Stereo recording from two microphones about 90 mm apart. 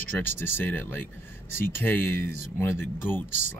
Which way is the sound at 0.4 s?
20° left (ahead or behind).